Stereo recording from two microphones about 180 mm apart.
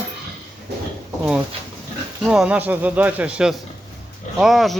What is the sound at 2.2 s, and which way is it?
Speech, 5° right (ahead or behind).